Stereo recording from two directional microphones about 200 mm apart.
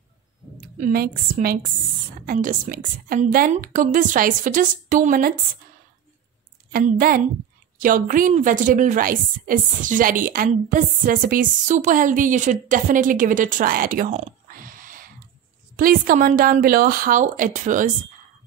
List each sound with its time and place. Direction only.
0.7 s a woman's voice: 45° right (ahead or behind)
6.7 s a woman's voice: 45° right (ahead or behind)